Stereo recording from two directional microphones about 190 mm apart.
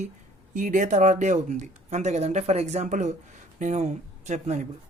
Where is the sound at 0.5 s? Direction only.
45° right (ahead or behind).